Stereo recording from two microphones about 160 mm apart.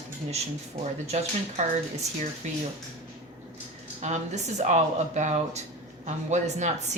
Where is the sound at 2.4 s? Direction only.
45° right (ahead or behind).